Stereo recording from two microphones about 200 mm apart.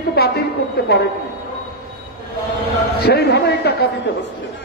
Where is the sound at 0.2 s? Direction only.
50° left (ahead or behind).